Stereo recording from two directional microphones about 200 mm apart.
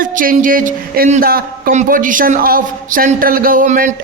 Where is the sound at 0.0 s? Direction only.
45° right (ahead or behind).